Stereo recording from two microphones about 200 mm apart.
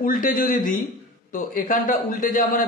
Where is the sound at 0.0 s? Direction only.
45° left (ahead or behind).